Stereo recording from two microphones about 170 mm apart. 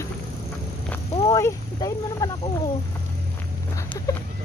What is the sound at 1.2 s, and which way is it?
Speech, 20° left (ahead or behind).